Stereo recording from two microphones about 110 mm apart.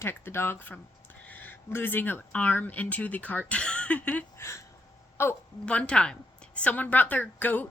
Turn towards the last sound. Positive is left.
turn(degrees=15)  # may be behind; listen again after turning